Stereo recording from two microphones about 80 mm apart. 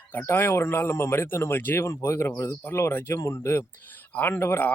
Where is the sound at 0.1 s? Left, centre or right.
Left.